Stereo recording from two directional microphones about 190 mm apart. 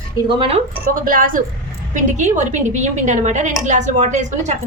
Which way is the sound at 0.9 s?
45° right (ahead or behind).